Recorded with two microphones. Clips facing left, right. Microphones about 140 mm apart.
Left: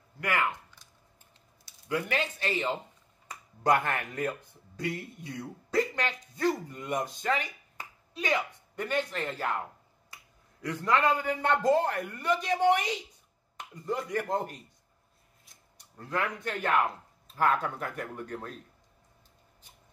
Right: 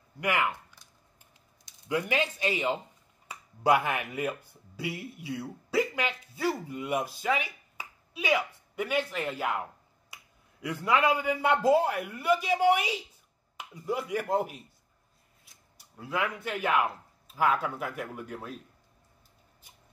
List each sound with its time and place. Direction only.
0.2 s a man's voice: 15° right (ahead or behind)